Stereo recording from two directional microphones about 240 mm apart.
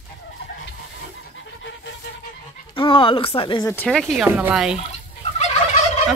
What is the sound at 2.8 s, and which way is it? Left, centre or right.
Speech, left.